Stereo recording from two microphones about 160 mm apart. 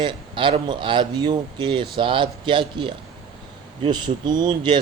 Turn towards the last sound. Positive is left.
turn(degrees=-30)  # may be behind; listen again after turning